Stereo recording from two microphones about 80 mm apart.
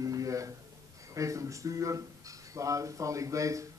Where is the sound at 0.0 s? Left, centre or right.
Right.